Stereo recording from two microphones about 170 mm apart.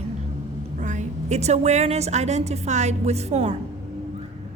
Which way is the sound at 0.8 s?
45° right (ahead or behind).